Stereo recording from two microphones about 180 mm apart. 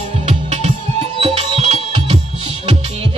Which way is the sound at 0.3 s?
40° right (ahead or behind).